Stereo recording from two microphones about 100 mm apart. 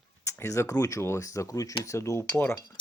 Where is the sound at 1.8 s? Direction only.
30° left (ahead or behind).